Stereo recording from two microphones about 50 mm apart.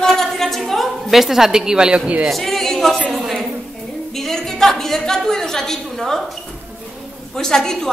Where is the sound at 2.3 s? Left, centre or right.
Centre.